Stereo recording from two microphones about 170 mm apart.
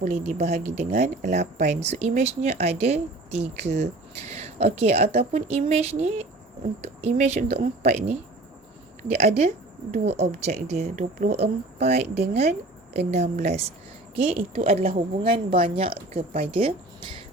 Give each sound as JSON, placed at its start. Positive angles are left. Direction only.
{"t": 0.0, "sound": "speech", "side_deg": -40}
{"t": 9.1, "sound": "speech", "side_deg": -40}